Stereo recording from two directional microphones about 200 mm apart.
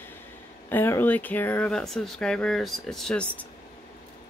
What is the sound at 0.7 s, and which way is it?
Speech, 10° left (ahead or behind).